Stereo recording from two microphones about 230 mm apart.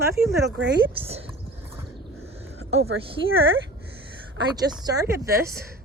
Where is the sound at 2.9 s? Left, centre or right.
Right.